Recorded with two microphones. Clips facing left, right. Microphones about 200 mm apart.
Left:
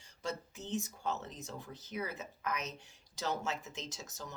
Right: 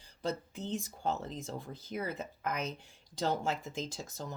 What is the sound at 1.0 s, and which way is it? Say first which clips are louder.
Speech: right 4 dB; 35° right (ahead or behind).